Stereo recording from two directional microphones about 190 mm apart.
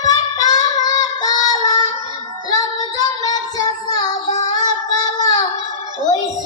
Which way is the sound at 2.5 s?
20° left (ahead or behind).